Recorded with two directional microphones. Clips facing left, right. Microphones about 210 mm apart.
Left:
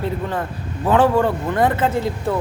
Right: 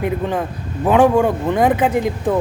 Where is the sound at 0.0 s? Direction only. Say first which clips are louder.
Right 3 dB; 15° right (ahead or behind).